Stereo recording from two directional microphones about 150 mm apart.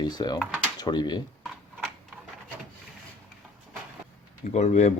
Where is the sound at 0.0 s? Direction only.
30° left (ahead or behind).